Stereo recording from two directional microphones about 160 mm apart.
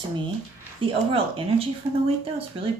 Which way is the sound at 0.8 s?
35° right (ahead or behind).